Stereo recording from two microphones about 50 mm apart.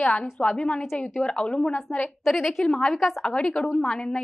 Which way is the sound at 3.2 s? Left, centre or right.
Centre.